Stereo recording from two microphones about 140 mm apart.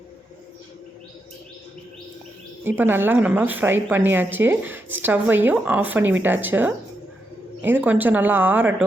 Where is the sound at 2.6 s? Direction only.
15° right (ahead or behind).